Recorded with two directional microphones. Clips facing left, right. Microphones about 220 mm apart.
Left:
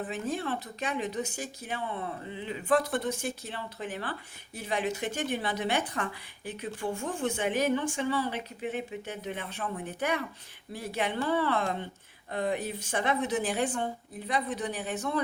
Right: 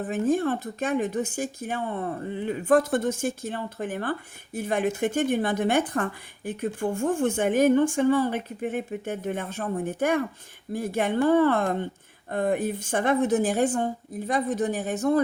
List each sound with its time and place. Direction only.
0.0 s speech: 50° right (ahead or behind)